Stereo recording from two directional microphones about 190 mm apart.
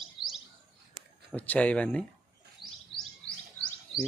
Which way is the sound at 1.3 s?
5° left (ahead or behind).